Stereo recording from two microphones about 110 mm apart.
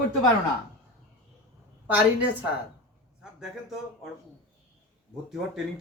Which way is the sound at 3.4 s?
5° right (ahead or behind).